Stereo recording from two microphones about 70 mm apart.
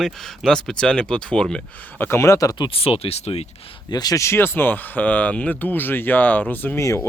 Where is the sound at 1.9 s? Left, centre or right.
Left.